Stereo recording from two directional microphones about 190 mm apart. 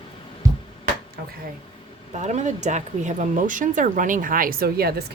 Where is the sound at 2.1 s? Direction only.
40° right (ahead or behind).